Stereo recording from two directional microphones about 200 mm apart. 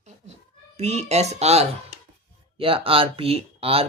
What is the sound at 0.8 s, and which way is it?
Speech, 30° right (ahead or behind).